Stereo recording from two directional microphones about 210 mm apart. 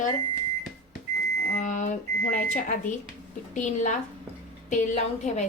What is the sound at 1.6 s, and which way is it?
Speech, 35° left (ahead or behind).